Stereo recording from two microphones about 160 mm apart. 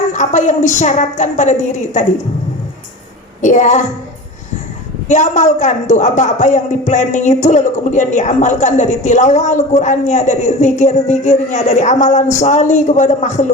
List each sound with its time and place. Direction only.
0.1 s speech: 50° left (ahead or behind)
3.4 s speech: 50° left (ahead or behind)
5.0 s speech: 50° left (ahead or behind)